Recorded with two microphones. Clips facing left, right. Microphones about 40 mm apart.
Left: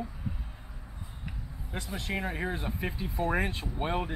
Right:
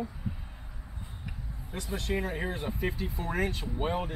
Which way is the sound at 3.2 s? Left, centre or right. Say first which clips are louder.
Left 3 dB; left.